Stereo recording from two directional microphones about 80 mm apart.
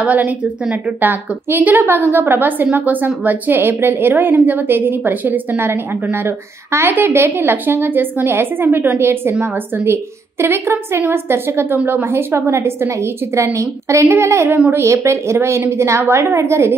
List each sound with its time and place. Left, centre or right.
0.0 s a woman's voice: centre
10.4 s a woman's voice: right
14.5 s a woman's voice: right
14.8 s a woman's voice: right